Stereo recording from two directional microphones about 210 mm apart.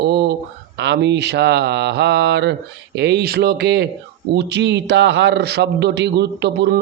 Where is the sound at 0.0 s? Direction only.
50° right (ahead or behind).